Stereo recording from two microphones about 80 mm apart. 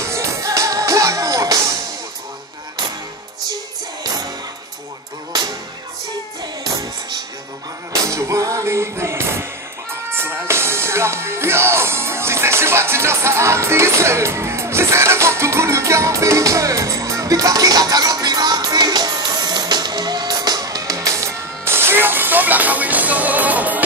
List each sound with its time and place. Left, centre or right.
0.0 s music: right
8.1 s music: right; by 23.8 s centre